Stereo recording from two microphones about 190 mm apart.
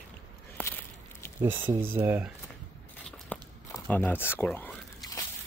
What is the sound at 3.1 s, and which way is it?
Crumpling, 5° left (ahead or behind).